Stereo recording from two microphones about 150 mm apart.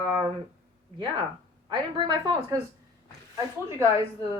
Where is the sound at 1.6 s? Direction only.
30° right (ahead or behind).